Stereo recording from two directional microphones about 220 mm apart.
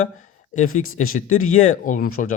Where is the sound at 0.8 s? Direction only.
70° left (ahead or behind).